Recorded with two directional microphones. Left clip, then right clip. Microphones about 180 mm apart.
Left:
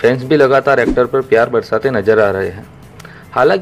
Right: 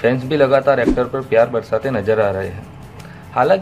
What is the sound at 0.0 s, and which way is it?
Speech, 35° left (ahead or behind).